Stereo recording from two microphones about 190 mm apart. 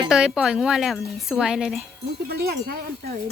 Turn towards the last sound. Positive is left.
turn(degrees=-55)  # may be behind; listen again after turning